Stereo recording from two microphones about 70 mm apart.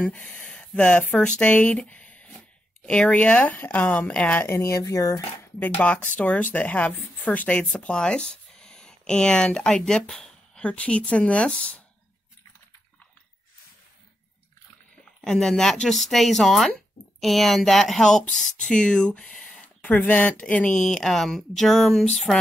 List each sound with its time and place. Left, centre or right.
0.0 s speech: centre
4.5 s speech: left
5.6 s speech: centre
15.2 s speech: centre
20.8 s speech: centre